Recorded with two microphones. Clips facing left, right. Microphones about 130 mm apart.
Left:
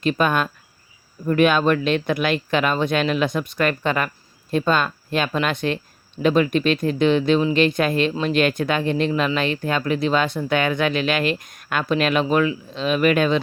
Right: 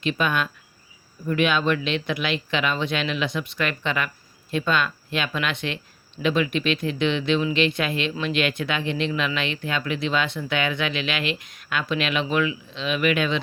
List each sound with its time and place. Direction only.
0.0 s speech: 45° left (ahead or behind)